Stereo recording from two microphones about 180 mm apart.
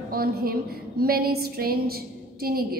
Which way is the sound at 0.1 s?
55° right (ahead or behind).